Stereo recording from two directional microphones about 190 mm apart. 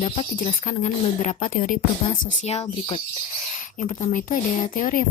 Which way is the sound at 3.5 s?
40° left (ahead or behind).